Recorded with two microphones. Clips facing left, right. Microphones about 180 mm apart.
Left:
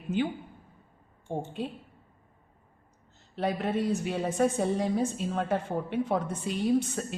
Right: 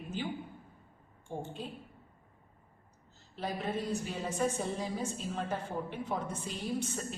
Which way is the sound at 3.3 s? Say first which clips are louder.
Left 7 dB; 65° left (ahead or behind).